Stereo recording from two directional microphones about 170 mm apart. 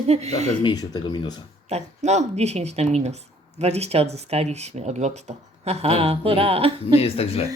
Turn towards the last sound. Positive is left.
turn(degrees=35)  # may be behind; listen again after turning